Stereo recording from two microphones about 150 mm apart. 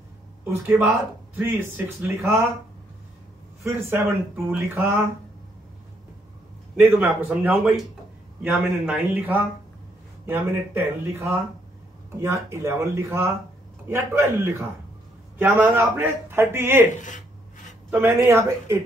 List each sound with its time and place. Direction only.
0.5 s a man's voice: 15° right (ahead or behind)
3.6 s a man's voice: 15° right (ahead or behind)
6.8 s a man's voice: 10° right (ahead or behind)
17.9 s a man's voice: 15° right (ahead or behind)